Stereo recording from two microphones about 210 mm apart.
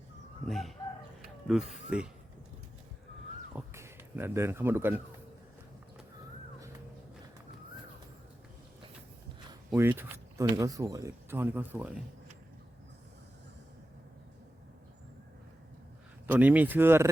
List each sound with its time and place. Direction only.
0.4 s chicken: centre (ahead or behind)
1.5 s speech: centre (ahead or behind)
3.5 s speech: 10° right (ahead or behind)
9.5 s speech: 10° right (ahead or behind)
16.2 s speech: 10° right (ahead or behind)